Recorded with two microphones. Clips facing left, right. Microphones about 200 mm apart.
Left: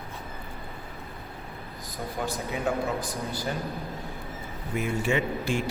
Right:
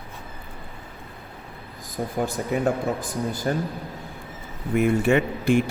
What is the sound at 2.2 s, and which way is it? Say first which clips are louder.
Speech: right 6 dB; 50° right (ahead or behind).